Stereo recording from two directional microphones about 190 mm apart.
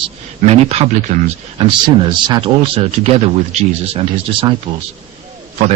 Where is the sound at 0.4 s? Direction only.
30° right (ahead or behind).